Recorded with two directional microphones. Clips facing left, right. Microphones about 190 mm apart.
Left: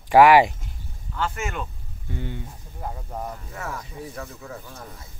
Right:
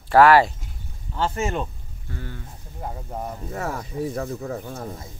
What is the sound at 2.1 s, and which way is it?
Speech, 20° left (ahead or behind).